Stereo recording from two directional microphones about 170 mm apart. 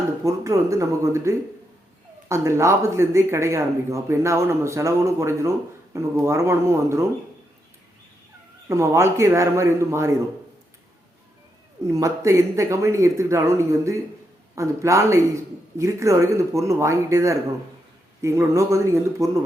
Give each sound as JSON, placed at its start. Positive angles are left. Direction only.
{"t": 0.3, "sound": "speech", "side_deg": -20}
{"t": 8.7, "sound": "speech", "side_deg": -15}
{"t": 11.9, "sound": "speech", "side_deg": -20}